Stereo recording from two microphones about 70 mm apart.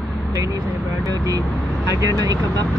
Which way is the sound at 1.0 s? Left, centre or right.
Right.